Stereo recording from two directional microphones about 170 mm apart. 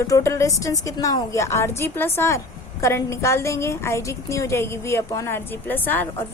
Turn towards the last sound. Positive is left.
turn(degrees=10)  # may be behind; listen again after turning